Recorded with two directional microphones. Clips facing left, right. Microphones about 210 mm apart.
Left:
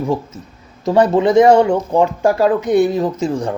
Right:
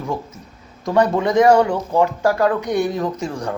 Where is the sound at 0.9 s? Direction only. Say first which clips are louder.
Left 4 dB; 25° left (ahead or behind).